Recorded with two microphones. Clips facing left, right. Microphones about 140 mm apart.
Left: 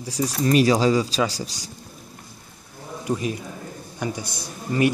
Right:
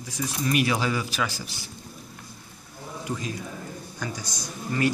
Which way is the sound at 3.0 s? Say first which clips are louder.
Left 7 dB; 20° left (ahead or behind).